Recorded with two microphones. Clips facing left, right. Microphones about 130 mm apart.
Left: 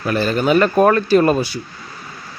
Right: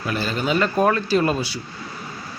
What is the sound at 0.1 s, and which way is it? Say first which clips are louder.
A man's voice: left 7 dB; 55° left (ahead or behind).